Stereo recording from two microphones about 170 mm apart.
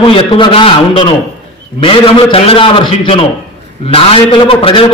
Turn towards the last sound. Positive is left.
turn(degrees=35)  # may be behind; listen again after turning